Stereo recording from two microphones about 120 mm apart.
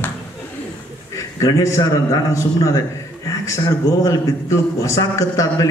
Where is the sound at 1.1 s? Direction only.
25° left (ahead or behind).